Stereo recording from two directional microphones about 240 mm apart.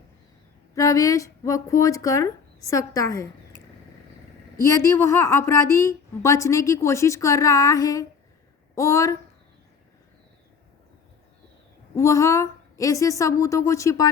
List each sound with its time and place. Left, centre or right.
0.8 s a woman's voice: centre
4.5 s a woman's voice: centre
11.9 s a woman's voice: centre